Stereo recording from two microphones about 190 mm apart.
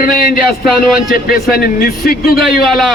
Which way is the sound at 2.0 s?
50° left (ahead or behind).